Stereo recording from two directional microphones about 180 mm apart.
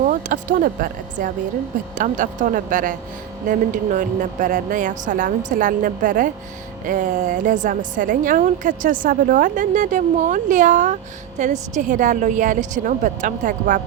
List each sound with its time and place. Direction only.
0.0 s a woman's voice: 45° right (ahead or behind)